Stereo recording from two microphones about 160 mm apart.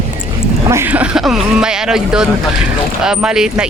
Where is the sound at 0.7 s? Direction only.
15° right (ahead or behind).